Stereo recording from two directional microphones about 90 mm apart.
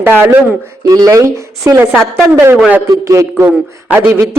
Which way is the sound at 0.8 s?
40° right (ahead or behind).